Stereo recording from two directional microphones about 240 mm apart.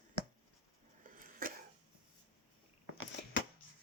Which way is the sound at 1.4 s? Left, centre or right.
Right.